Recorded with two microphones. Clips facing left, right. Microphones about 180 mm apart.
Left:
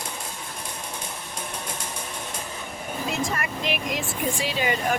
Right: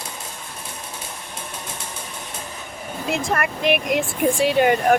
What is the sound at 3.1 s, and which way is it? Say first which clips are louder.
Speech: right 6 dB; 60° right (ahead or behind).